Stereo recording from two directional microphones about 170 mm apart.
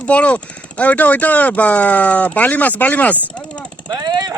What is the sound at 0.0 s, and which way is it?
Speech, 10° left (ahead or behind).